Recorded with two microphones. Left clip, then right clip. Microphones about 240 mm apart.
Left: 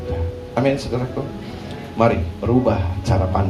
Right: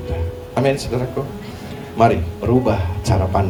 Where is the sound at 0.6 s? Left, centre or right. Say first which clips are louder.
Right 1 dB; right.